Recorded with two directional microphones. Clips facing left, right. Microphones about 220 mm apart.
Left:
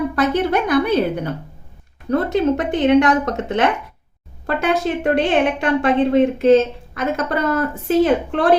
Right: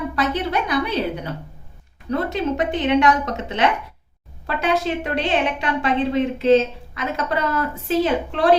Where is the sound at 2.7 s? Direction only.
50° left (ahead or behind).